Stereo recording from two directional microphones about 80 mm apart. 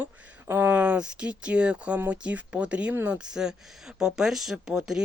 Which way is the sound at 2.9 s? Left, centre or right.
Right.